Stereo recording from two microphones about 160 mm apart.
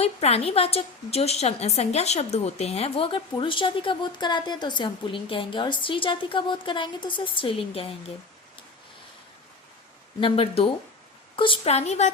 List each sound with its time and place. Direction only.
0.0 s a woman's voice: 40° left (ahead or behind)
10.2 s a woman's voice: 35° left (ahead or behind)